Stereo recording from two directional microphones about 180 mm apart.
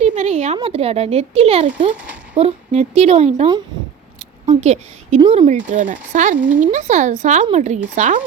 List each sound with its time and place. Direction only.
0.0 s a woman's voice: 40° right (ahead or behind)
5.5 s a woman's voice: 45° right (ahead or behind)